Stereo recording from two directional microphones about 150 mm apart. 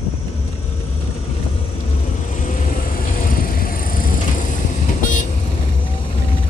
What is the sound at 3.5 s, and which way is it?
Vehicle, 70° left (ahead or behind).